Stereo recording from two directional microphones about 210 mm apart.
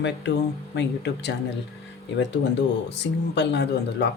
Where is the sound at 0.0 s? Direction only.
60° left (ahead or behind).